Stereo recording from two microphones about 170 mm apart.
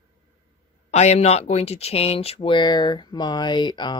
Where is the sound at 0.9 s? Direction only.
40° left (ahead or behind).